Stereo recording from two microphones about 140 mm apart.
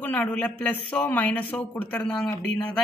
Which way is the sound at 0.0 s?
10° left (ahead or behind).